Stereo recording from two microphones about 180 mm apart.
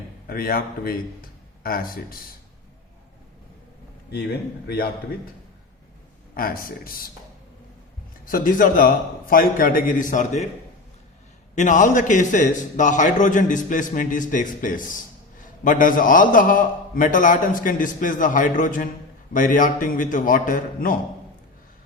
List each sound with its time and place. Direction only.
0.3 s speech: 55° left (ahead or behind)
4.1 s a man's voice: 65° left (ahead or behind)
6.3 s a man's voice: 55° left (ahead or behind)
8.2 s a man's voice: 50° left (ahead or behind)
11.5 s a man's voice: 45° left (ahead or behind)